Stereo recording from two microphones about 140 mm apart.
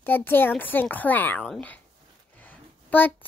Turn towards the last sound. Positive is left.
turn(degrees=10)  # may be behind; listen again after turning